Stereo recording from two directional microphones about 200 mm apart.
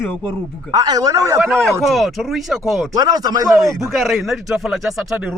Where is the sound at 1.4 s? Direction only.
5° left (ahead or behind).